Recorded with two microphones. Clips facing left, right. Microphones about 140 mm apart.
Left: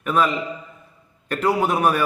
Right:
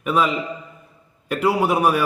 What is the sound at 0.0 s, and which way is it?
A man's voice, 5° right (ahead or behind).